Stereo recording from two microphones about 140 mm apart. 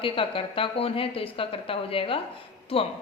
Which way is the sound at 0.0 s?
40° left (ahead or behind).